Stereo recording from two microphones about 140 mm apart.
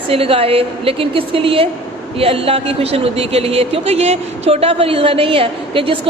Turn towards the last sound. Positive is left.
turn(degrees=-40)  # may be behind; listen again after turning